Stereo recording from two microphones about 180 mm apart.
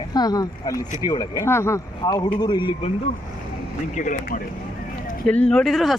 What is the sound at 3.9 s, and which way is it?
Speech, 45° left (ahead or behind).